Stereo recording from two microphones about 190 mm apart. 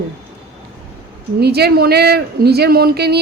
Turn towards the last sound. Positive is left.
turn(degrees=-60)  # may be behind; listen again after turning